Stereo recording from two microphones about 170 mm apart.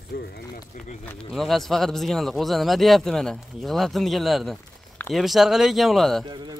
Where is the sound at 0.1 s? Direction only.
65° left (ahead or behind).